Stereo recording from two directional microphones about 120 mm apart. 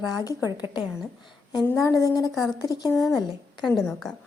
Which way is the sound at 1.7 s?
30° left (ahead or behind).